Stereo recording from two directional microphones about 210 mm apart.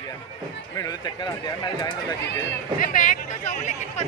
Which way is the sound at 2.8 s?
40° left (ahead or behind).